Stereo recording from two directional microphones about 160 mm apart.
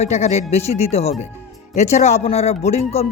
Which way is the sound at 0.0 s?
45° left (ahead or behind).